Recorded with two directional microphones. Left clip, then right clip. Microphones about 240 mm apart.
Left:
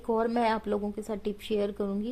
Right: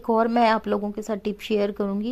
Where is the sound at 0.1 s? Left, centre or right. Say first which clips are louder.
Right 7 dB; right.